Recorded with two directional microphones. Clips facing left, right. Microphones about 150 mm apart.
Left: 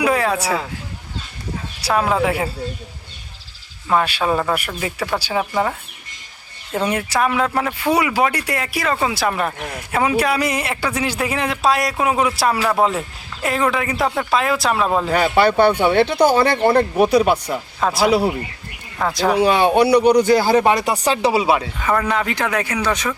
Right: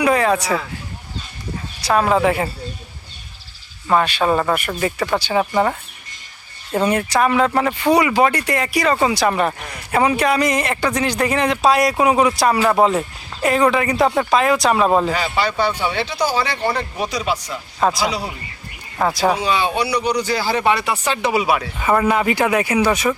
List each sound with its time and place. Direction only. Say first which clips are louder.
0.0 s speech: right 2 dB; 5° left (ahead or behind)
1.8 s speech: right 2 dB; centre (ahead or behind)
3.8 s speech: right 2 dB; 5° left (ahead or behind)
6.7 s speech: right 2 dB; 5° left (ahead or behind)
15.1 s speech: left 6 dB; 55° left (ahead or behind)
17.7 s speech: right 3 dB; 5° right (ahead or behind)
18.0 s speech: left 7 dB; 55° left (ahead or behind)
18.9 s speech: right 1 dB; 5° right (ahead or behind)
19.4 s speech: left 6 dB; 55° left (ahead or behind); by 21.7 s 25° left (ahead or behind)
21.8 s speech: right 3 dB; 10° right (ahead or behind)